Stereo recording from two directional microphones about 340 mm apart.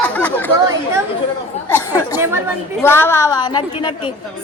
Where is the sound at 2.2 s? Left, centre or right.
Centre.